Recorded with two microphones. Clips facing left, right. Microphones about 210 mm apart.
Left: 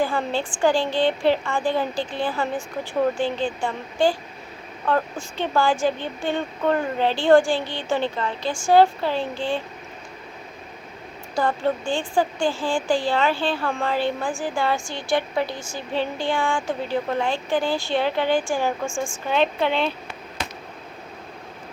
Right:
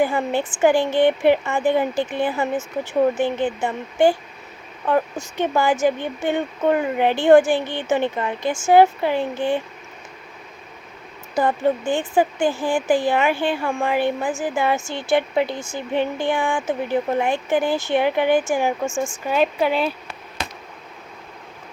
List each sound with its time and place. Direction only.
0.0 s speech: 20° right (ahead or behind)
5.4 s speech: 20° right (ahead or behind)
7.6 s a woman's voice: 55° right (ahead or behind)
7.9 s speech: 15° right (ahead or behind)
11.3 s speech: 20° right (ahead or behind)
18.9 s a woman's voice: 5° right (ahead or behind)